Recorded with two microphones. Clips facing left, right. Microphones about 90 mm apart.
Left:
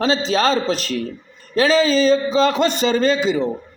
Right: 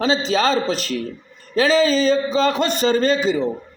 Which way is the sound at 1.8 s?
20° left (ahead or behind).